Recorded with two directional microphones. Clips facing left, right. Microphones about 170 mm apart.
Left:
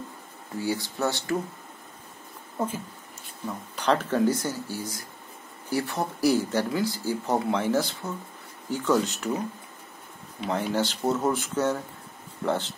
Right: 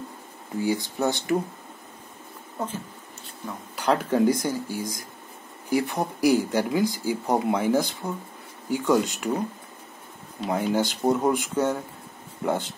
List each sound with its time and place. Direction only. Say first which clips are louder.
0.6 s speech: right 3 dB; 15° right (ahead or behind)
3.7 s speech: right 2 dB; 10° right (ahead or behind)
10.5 s speech: right 2 dB; 10° right (ahead or behind)